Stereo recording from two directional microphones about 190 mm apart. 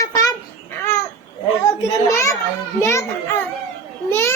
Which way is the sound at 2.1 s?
15° left (ahead or behind).